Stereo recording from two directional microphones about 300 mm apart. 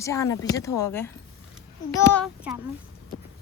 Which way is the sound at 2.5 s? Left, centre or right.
Centre.